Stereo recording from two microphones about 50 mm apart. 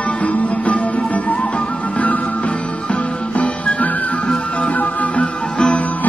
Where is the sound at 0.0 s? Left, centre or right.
Left.